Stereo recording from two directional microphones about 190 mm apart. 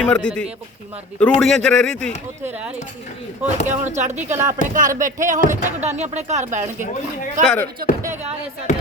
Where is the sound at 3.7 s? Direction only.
40° right (ahead or behind).